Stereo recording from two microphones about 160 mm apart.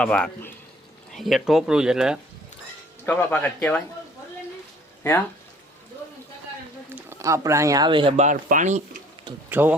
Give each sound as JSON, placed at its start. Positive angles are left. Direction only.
{"t": 0.0, "sound": "speech", "side_deg": 5}
{"t": 3.1, "sound": "speech", "side_deg": 10}
{"t": 6.9, "sound": "speech", "side_deg": -15}
{"t": 8.1, "sound": "speech", "side_deg": -50}
{"t": 9.5, "sound": "speech", "side_deg": -10}